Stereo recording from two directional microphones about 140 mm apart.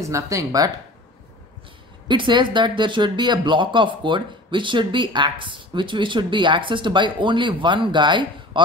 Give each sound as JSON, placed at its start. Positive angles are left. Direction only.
{"t": 0.1, "sound": "speech", "side_deg": -20}
{"t": 2.0, "sound": "speech", "side_deg": -35}